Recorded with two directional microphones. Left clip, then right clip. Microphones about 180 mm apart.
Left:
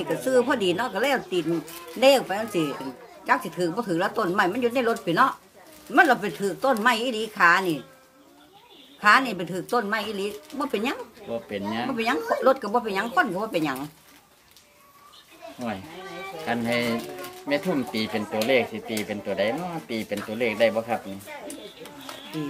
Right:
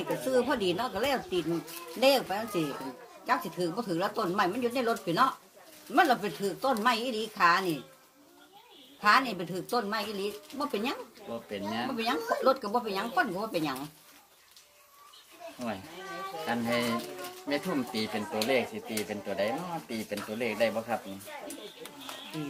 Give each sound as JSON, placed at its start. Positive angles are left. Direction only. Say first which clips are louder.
{"t": 0.1, "sound": "speech", "louder": "left 6 dB", "side_deg": 0}
{"t": 9.0, "sound": "speech", "louder": "left 6 dB", "side_deg": 0}
{"t": 11.5, "sound": "speech", "louder": "left 3 dB", "side_deg": 45}
{"t": 12.0, "sound": "speech", "louder": "left 6 dB", "side_deg": 5}
{"t": 16.4, "sound": "speech", "louder": "left 5 dB", "side_deg": 45}